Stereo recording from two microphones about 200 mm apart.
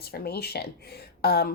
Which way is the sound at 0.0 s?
50° left (ahead or behind).